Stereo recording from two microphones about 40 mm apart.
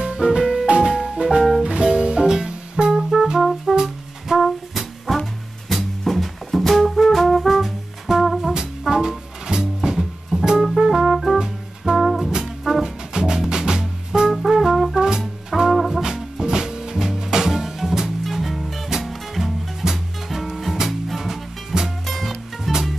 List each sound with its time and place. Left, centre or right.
0.0 s music: centre
1.6 s music: centre
3.0 s music: centre
3.7 s brass instrument: centre
4.4 s music: centre
10.6 s music: centre
11.3 s music: centre
14.3 s brass instrument: centre
15.0 s music: centre
15.7 s brass instrument: centre
16.0 s music: centre
22.0 s music: centre